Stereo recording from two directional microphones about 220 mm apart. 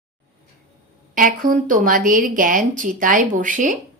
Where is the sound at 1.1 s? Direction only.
40° right (ahead or behind).